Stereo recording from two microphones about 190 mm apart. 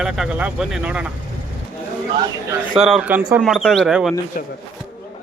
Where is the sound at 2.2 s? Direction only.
20° right (ahead or behind).